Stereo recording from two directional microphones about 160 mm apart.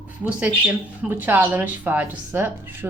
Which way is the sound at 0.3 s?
10° right (ahead or behind).